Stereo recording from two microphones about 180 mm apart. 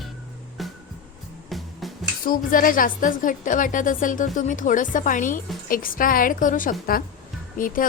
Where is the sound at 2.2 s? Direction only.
50° left (ahead or behind).